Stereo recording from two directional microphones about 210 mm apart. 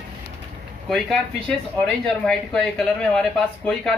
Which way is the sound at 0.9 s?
Centre (ahead or behind).